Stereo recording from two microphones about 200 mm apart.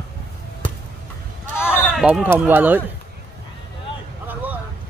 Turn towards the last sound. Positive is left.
turn(degrees=-10)  # may be behind; listen again after turning